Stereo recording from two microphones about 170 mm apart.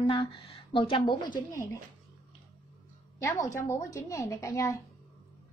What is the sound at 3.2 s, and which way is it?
A woman's voice, 15° left (ahead or behind).